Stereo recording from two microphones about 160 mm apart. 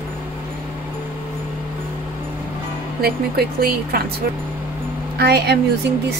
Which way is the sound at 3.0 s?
70° right (ahead or behind).